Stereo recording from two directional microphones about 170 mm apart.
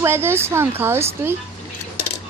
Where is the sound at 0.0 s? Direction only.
15° right (ahead or behind).